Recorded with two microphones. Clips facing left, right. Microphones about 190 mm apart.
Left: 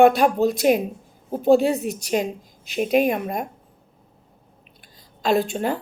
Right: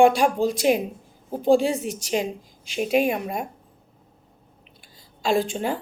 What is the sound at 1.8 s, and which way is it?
Speech, 55° left (ahead or behind).